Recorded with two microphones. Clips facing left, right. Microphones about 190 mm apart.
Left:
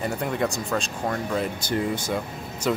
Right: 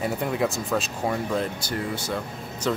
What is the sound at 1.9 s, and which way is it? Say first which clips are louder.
Speech: left 2 dB; 15° left (ahead or behind).